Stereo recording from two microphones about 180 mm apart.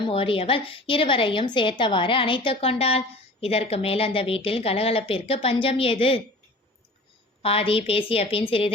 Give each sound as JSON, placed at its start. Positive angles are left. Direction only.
{"t": 0.0, "sound": "a woman's voice", "side_deg": 30}
{"t": 7.4, "sound": "a woman's voice", "side_deg": 30}